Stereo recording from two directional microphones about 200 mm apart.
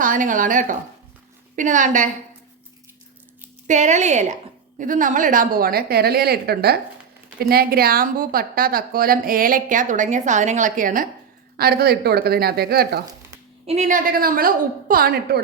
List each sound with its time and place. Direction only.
0.0 s speech: 40° right (ahead or behind)
3.7 s a woman's voice: 35° right (ahead or behind)
13.7 s a woman's voice: 35° right (ahead or behind)